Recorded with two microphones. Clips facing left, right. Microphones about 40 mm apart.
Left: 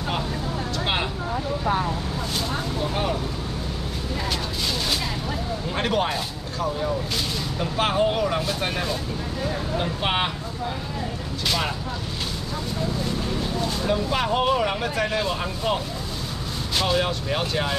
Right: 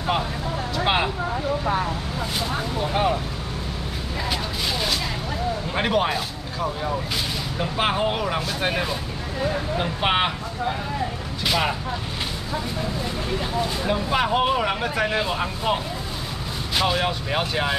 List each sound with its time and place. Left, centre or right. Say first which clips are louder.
0.7 s vehicle: right 5 dB; centre
2.8 s vehicle: right 5 dB; centre
5.8 s speech: right 2 dB; centre
11.4 s speech: right 3 dB; centre
13.6 s speech: even; centre